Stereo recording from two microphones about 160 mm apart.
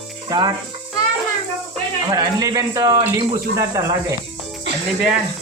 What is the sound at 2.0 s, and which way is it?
Speech, 25° right (ahead or behind).